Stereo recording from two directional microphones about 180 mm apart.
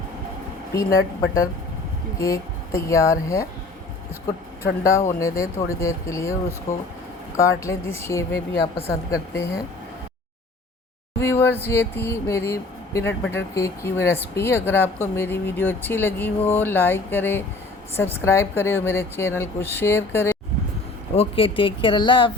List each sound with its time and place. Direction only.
0.7 s speech: 20° left (ahead or behind)
4.8 s speech: 15° left (ahead or behind)
7.3 s speech: 15° left (ahead or behind)
11.2 s speech: 15° left (ahead or behind)
21.2 s speech: 30° left (ahead or behind)